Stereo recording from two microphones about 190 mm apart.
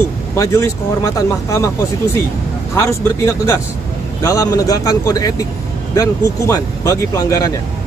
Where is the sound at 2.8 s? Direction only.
15° left (ahead or behind).